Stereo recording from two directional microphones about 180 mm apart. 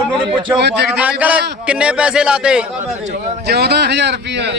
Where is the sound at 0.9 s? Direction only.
5° right (ahead or behind).